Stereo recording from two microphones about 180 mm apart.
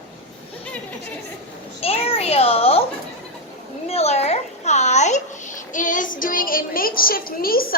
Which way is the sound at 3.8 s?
35° left (ahead or behind).